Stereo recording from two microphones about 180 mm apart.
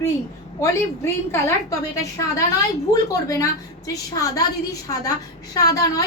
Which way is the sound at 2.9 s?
20° left (ahead or behind).